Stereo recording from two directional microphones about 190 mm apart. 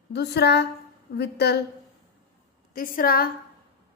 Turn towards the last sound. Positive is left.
turn(degrees=50)  # may be behind; listen again after turning